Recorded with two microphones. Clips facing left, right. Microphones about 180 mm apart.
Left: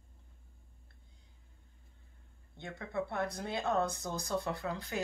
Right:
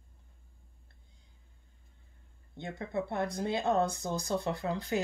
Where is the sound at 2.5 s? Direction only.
20° right (ahead or behind).